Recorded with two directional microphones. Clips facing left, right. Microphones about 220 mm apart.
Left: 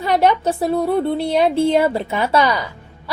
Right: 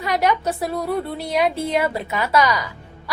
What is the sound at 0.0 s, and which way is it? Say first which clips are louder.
A woman's voice: left 4 dB; 30° left (ahead or behind).